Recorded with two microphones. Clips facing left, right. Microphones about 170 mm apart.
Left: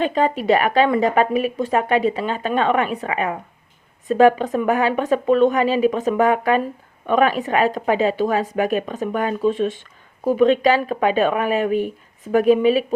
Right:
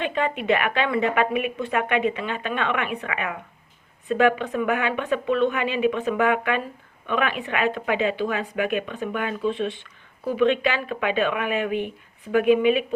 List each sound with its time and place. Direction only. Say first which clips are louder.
0.0 s speech: left 6 dB; 35° left (ahead or behind)